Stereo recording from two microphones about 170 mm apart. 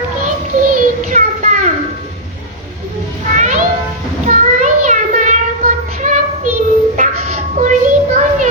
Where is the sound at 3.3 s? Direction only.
45° right (ahead or behind).